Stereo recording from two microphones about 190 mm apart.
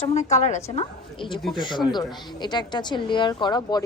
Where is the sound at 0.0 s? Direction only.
35° left (ahead or behind).